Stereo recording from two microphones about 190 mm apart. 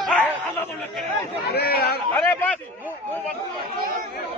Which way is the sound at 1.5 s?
55° left (ahead or behind).